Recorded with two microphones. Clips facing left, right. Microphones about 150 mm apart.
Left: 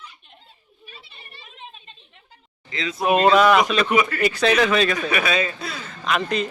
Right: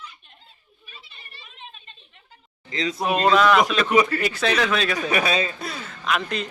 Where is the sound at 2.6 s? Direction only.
40° right (ahead or behind).